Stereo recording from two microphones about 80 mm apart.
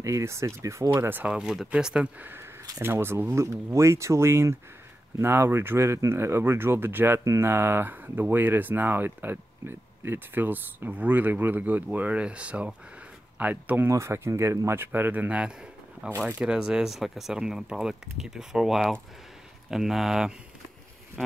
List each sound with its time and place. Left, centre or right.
0.0 s speech: right
1.2 s speech: centre
2.1 s speech: right
13.8 s speech: right
14.9 s speech: right; by 20.3 s centre